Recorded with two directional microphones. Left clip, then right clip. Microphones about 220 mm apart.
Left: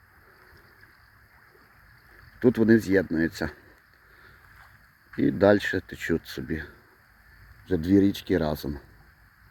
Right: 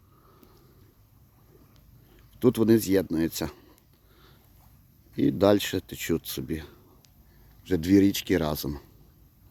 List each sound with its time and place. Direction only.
2.4 s speech: 5° right (ahead or behind)
5.4 s speech: 5° right (ahead or behind)